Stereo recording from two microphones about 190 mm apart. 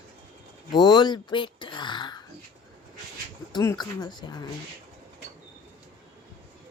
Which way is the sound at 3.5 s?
20° left (ahead or behind).